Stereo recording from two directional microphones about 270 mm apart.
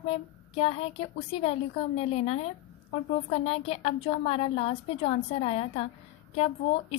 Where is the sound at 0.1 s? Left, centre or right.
Left.